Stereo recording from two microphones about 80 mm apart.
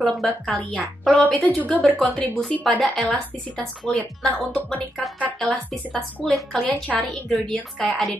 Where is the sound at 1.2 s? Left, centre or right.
Centre.